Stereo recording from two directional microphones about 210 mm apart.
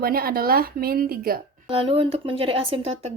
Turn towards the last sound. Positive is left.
turn(degrees=-25)  # may be behind; listen again after turning